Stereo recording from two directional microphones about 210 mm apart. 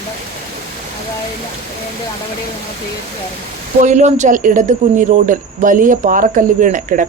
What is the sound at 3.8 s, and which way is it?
A woman's voice, 35° right (ahead or behind).